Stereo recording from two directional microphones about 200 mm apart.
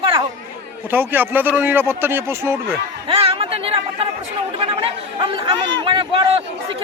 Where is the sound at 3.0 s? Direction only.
30° right (ahead or behind).